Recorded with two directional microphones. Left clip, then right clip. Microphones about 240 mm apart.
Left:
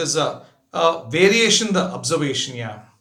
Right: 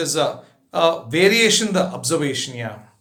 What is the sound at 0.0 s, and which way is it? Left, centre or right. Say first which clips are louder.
A man's voice: right 1 dB; centre.